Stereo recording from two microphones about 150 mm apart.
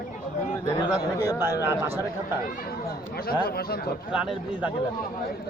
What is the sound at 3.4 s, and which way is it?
Speech, 90° left.